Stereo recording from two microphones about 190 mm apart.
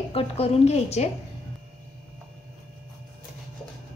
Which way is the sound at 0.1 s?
30° left (ahead or behind).